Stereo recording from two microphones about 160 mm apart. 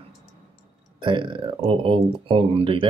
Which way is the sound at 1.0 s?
30° right (ahead or behind).